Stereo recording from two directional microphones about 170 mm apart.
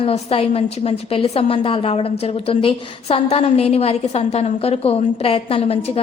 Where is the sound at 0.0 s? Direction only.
35° left (ahead or behind).